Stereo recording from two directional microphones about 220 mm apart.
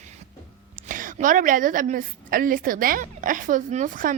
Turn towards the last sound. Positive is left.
turn(degrees=-35)  # may be behind; listen again after turning